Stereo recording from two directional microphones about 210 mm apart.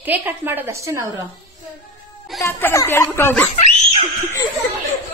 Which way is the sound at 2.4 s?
15° left (ahead or behind).